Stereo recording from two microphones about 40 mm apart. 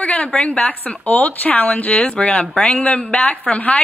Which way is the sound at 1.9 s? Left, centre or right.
Left.